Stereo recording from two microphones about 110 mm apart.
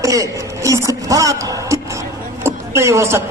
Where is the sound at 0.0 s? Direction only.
30° right (ahead or behind).